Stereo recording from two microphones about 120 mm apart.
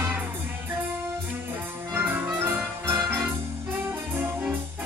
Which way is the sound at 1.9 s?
20° right (ahead or behind).